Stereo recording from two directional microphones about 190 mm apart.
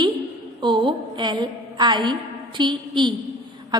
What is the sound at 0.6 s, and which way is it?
A woman's voice, 25° right (ahead or behind).